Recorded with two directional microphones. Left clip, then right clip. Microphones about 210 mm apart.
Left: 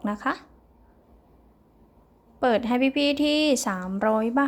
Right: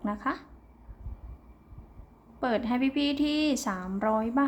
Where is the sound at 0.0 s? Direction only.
30° left (ahead or behind).